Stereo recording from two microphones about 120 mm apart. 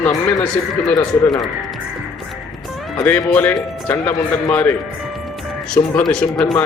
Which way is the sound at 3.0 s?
15° left (ahead or behind).